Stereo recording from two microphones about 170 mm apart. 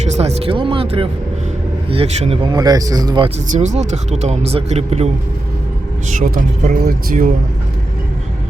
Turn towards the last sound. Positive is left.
turn(degrees=-50)  # may be behind; listen again after turning